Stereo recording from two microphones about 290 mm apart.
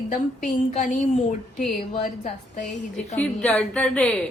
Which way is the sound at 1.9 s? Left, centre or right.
Left.